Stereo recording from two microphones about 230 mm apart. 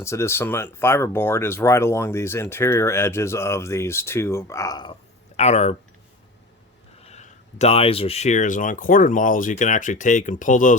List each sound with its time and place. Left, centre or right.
0.0 s speech: centre
5.4 s speech: left
7.0 s speech: left